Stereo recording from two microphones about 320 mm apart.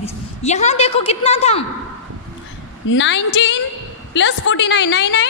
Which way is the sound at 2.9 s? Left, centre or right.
Left.